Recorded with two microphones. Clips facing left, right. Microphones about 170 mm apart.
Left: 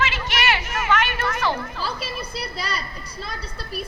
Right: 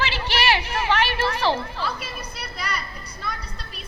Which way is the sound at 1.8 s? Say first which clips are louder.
Left 1 dB; 35° left (ahead or behind).